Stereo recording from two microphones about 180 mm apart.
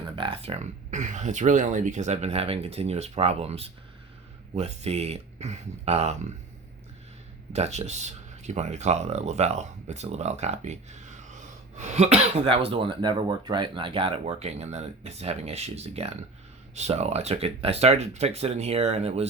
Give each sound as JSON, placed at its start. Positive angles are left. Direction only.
{"t": 0.2, "sound": "speech", "side_deg": -30}
{"t": 7.5, "sound": "speech", "side_deg": -40}